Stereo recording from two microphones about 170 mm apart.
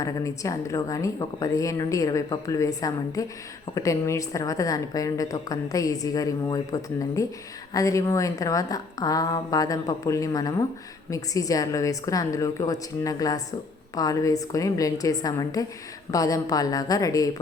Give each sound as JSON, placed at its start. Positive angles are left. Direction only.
{"t": 0.0, "sound": "a woman's voice", "side_deg": 20}